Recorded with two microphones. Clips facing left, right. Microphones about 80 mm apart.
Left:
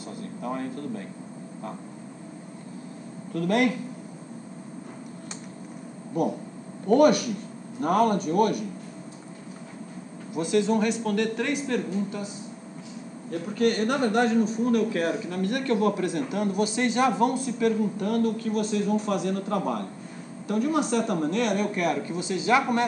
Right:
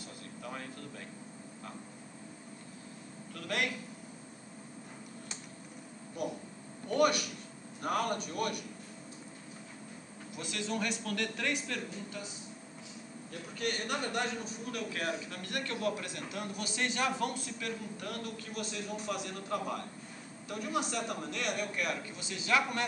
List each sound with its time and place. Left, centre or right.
0.4 s a sound: left
3.3 s a man's voice: left
6.9 s a man's voice: left
10.4 s a man's voice: centre
13.3 s a man's voice: left
14.8 s a man's voice: left
16.6 s a man's voice: centre; by 22.2 s left
22.4 s speech: left